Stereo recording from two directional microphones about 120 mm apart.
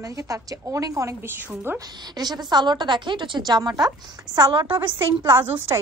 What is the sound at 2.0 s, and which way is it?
A woman's voice, 35° right (ahead or behind).